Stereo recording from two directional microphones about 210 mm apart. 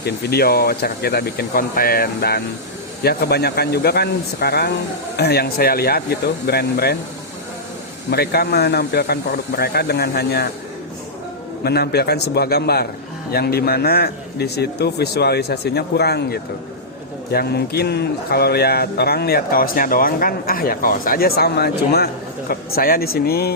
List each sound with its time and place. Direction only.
0.0 s speech: 50° left (ahead or behind)
8.1 s speech: 50° left (ahead or behind)
11.6 s speech: 50° left (ahead or behind)